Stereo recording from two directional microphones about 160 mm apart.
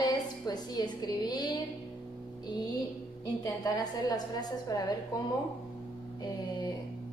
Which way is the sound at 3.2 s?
25° left (ahead or behind).